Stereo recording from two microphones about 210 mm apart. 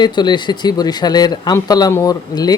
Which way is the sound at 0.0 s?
20° left (ahead or behind).